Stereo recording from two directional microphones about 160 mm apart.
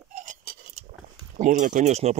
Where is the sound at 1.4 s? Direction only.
50° right (ahead or behind).